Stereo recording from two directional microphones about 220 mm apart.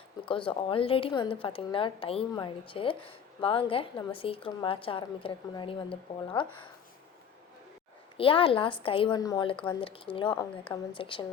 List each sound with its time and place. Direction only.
0.3 s a woman's voice: 25° left (ahead or behind)
8.1 s a woman's voice: 25° left (ahead or behind)